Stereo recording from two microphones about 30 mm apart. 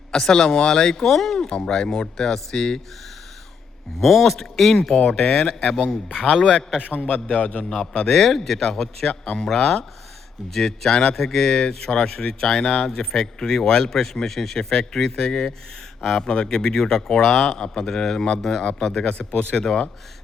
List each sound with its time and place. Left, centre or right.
0.1 s a man's voice: left
1.5 s a man's voice: left
4.0 s a man's voice: centre; by 6.7 s left
6.7 s a man's voice: left
7.0 s speech: left
7.3 s a man's voice: left
8.1 s a man's voice: centre
19.1 s speech: left